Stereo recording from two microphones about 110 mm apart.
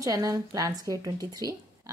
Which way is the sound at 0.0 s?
30° right (ahead or behind).